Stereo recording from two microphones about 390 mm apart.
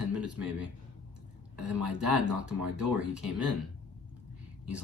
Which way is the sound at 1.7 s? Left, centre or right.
Right.